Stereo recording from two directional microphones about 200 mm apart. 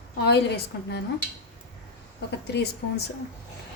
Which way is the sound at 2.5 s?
55° left (ahead or behind).